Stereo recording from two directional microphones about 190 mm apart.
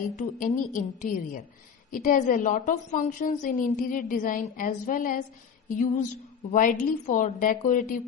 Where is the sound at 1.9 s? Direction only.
45° left (ahead or behind).